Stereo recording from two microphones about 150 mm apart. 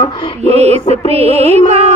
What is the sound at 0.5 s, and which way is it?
Music, 45° right (ahead or behind).